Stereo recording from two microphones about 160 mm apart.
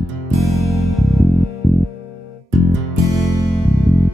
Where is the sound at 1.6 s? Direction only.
Centre (ahead or behind).